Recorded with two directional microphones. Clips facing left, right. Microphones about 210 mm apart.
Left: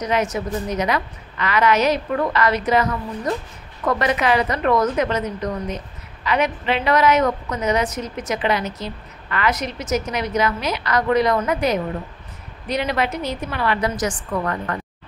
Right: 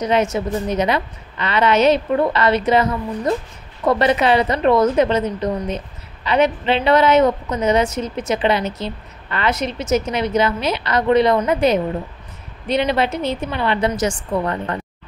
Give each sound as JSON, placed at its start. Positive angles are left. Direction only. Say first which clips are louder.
{"t": 0.0, "sound": "a woman's voice", "louder": "right 4 dB", "side_deg": -25}